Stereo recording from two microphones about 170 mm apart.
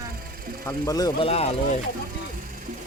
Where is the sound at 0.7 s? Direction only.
20° left (ahead or behind).